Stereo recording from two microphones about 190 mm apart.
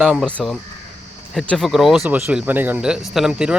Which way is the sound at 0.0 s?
Centre (ahead or behind).